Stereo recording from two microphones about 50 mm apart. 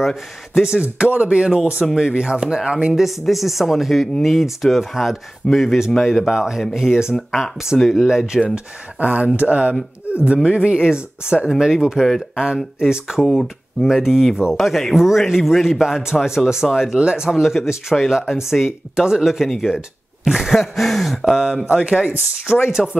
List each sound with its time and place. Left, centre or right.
0.0 s speech: centre
0.9 s speech: right
2.9 s a man's voice: centre
7.8 s a man's voice: centre
9.0 s speech: right
13.2 s speech: centre
13.8 s speech: centre
14.5 s a man's voice: centre
16.9 s speech: centre
17.3 s a man's voice: centre
21.6 s speech: right
22.8 s a man's voice: centre